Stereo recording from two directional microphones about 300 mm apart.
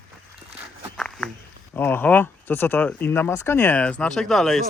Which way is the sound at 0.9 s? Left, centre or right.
Centre.